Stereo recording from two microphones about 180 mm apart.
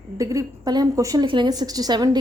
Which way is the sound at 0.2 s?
20° right (ahead or behind).